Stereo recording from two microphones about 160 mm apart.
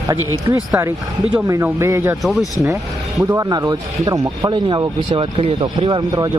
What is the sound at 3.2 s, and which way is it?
Speech, 20° right (ahead or behind).